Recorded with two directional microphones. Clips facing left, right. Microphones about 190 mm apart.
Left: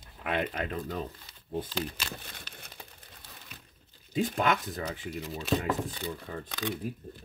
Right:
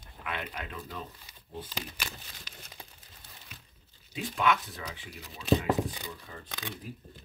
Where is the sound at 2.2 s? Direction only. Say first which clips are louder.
Left 3 dB; 60° left (ahead or behind).